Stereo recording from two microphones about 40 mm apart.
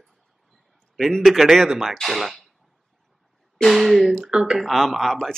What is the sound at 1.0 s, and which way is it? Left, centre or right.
Speech, centre.